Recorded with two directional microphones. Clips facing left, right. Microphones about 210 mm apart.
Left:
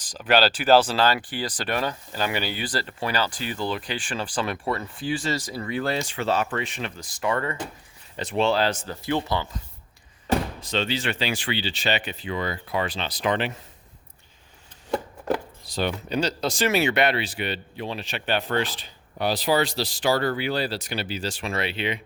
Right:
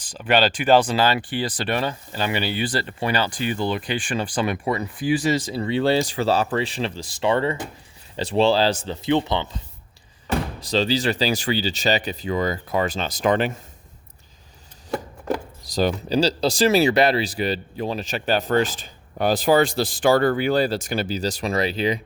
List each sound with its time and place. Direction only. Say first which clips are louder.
0.0 s a sound: right 2 dB; 10° right (ahead or behind)
0.3 s speech: right 1 dB; 5° left (ahead or behind); by 9.5 s 20° right (ahead or behind)
10.6 s speech: right 5 dB; 35° right (ahead or behind)
15.6 s speech: right 5 dB; 40° right (ahead or behind)